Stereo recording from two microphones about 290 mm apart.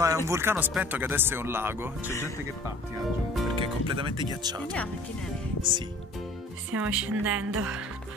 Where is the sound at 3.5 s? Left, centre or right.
Centre.